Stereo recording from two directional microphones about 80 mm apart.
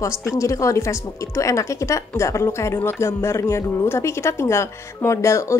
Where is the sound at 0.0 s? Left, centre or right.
Left.